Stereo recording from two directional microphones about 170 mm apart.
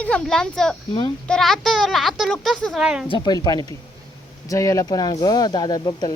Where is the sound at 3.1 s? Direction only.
25° left (ahead or behind).